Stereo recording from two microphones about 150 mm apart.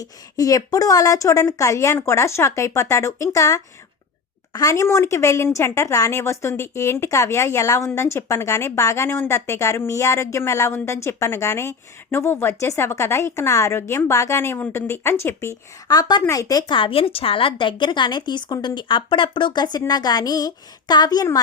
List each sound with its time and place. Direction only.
0.0 s a woman's voice: 25° left (ahead or behind)